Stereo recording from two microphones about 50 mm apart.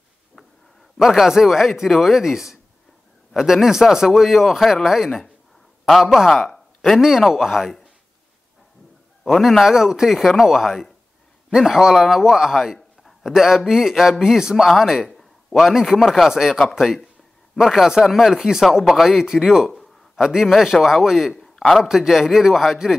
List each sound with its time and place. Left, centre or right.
0.9 s a man's voice: centre
9.2 s a man's voice: centre
17.8 s a man's voice: centre
21.3 s a sound: centre
21.7 s a man's voice: centre